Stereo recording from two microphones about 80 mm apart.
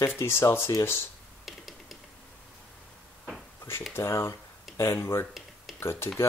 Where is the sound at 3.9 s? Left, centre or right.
Left.